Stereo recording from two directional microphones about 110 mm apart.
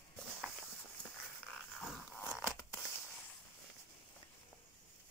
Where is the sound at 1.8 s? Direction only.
5° left (ahead or behind).